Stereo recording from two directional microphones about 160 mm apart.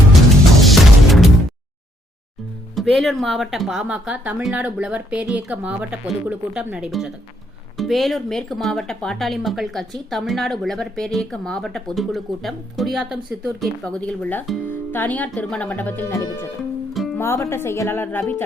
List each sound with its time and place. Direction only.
0.6 s music: centre (ahead or behind)
2.7 s speech: centre (ahead or behind)